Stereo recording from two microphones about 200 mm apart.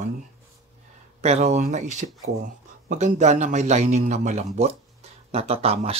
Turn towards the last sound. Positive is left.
turn(degrees=-30)  # may be behind; listen again after turning